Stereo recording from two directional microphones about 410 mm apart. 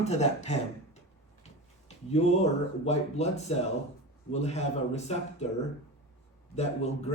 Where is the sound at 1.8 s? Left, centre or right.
Centre.